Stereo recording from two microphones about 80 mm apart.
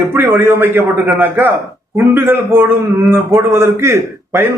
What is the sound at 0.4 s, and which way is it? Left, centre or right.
A man's voice, right.